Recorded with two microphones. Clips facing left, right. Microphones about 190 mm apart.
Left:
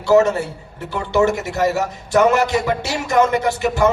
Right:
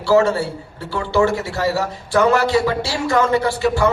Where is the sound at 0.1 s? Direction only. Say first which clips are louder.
Left 1 dB; 20° left (ahead or behind).